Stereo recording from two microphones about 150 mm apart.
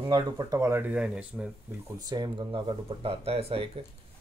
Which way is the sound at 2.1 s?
30° right (ahead or behind).